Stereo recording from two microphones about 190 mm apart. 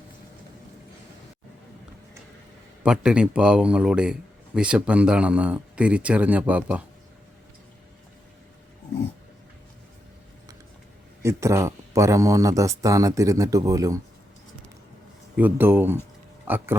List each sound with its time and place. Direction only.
2.8 s speech: 5° right (ahead or behind)
11.2 s speech: 15° right (ahead or behind)
15.4 s speech: 10° right (ahead or behind)